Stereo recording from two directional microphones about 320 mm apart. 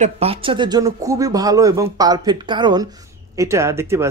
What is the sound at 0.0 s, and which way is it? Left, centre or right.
Speech, centre.